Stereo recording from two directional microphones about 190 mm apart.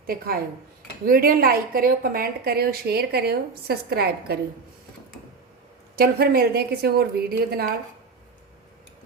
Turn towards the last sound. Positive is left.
turn(degrees=-55)  # may be behind; listen again after turning